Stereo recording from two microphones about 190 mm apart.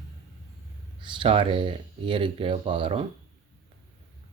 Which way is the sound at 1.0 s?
25° right (ahead or behind).